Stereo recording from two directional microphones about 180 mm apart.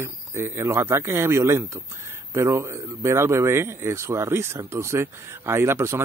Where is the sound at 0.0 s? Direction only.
15° right (ahead or behind).